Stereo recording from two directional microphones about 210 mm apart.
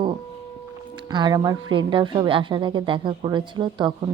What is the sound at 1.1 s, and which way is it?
A woman's voice, 20° right (ahead or behind).